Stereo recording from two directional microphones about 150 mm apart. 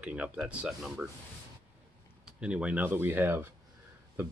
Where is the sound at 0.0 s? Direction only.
10° right (ahead or behind).